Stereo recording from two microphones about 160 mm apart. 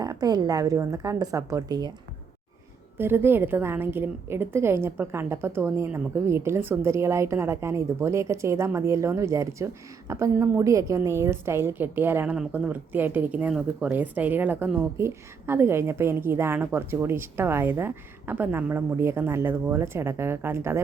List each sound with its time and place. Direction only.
0.0 s a woman's voice: 25° right (ahead or behind)
3.0 s a woman's voice: 15° right (ahead or behind)